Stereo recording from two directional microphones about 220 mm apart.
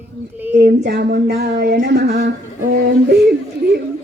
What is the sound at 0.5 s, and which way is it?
A woman's voice, 50° right (ahead or behind).